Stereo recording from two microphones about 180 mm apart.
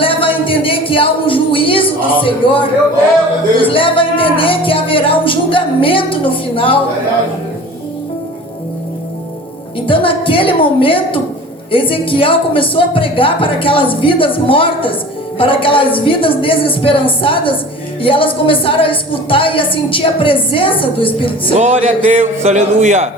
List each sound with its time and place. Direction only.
0.0 s speech: 30° left (ahead or behind)
3.6 s music: 30° left (ahead or behind)
9.8 s a woman's voice: 30° left (ahead or behind)
21.6 s a man's voice: 40° right (ahead or behind)